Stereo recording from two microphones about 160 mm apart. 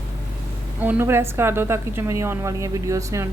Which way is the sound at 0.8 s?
15° right (ahead or behind).